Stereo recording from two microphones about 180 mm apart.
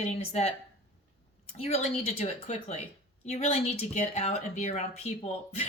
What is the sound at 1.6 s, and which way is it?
A woman's voice, 35° left (ahead or behind).